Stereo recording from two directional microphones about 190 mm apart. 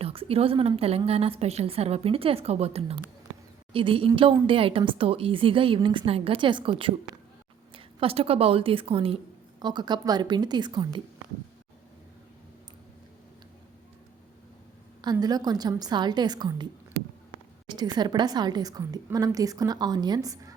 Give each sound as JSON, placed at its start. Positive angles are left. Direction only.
{"t": 0.0, "sound": "a woman's voice", "side_deg": -30}
{"t": 15.0, "sound": "a woman's voice", "side_deg": -20}
{"t": 17.9, "sound": "a woman's voice", "side_deg": -20}